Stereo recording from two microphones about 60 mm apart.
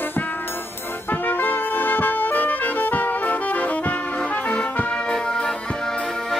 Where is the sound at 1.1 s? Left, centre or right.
Left.